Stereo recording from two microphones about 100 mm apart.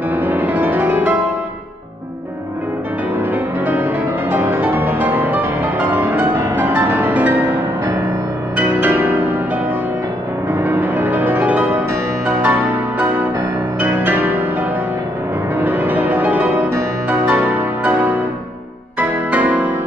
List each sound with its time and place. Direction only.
0.1 s music: 15° right (ahead or behind)
3.6 s music: 20° right (ahead or behind)
10.6 s music: 15° right (ahead or behind)
15.6 s music: 15° right (ahead or behind)